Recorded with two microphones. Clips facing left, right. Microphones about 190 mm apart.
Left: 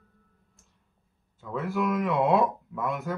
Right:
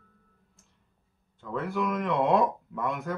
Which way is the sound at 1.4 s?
5° left (ahead or behind).